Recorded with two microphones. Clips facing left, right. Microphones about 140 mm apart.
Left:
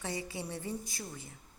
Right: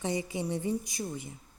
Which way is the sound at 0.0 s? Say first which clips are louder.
Right 6 dB; 20° right (ahead or behind).